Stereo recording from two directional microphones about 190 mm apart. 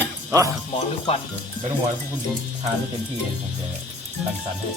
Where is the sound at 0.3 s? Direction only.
15° right (ahead or behind).